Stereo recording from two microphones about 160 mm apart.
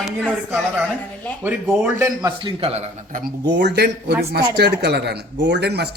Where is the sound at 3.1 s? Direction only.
90° right.